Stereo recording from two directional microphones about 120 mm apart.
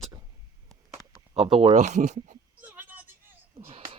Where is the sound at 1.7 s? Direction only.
80° right.